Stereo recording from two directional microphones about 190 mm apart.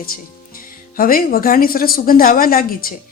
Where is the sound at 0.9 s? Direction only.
50° left (ahead or behind).